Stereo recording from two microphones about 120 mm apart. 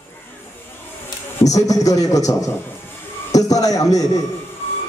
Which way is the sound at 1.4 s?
30° left (ahead or behind).